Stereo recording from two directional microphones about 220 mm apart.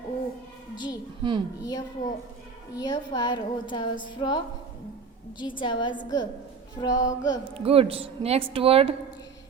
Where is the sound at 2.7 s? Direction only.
20° left (ahead or behind).